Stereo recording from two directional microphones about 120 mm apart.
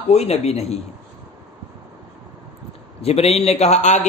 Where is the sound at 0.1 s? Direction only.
60° left (ahead or behind).